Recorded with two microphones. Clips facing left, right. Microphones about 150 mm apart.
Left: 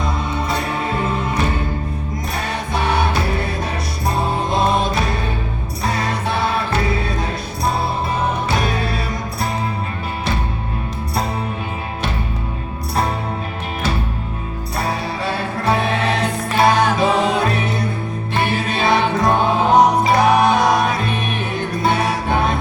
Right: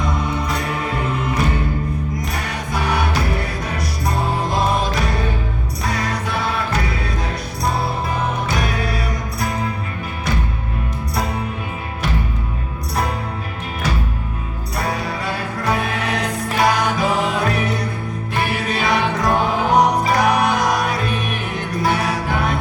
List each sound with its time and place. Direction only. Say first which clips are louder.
2.7 s music: left 2 dB; 25° left (ahead or behind)
5.9 s music: left 2 dB; 25° left (ahead or behind)
8.4 s music: left 2 dB; 25° left (ahead or behind)
14.8 s music: left 1 dB; 30° left (ahead or behind)